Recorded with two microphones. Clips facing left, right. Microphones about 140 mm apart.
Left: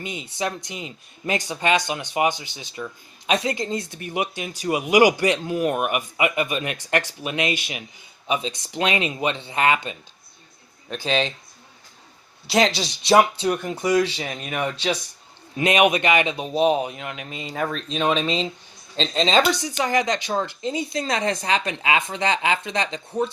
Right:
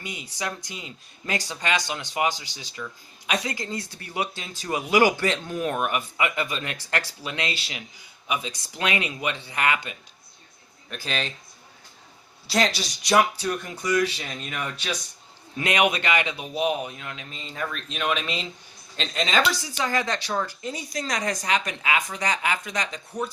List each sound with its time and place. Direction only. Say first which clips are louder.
0.0 s speech: left 5 dB; 25° left (ahead or behind)
12.5 s speech: left 4 dB; 25° left (ahead or behind)
17.0 s speech: left 5 dB; 75° left (ahead or behind)
17.5 s speech: left 6 dB; 40° left (ahead or behind)